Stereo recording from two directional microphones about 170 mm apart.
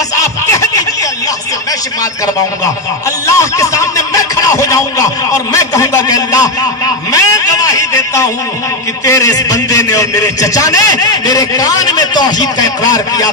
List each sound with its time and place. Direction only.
0.2 s music: 15° left (ahead or behind)
3.2 s speech: 20° left (ahead or behind)
7.1 s a sound: 20° left (ahead or behind)
9.0 s a man's voice: 20° left (ahead or behind)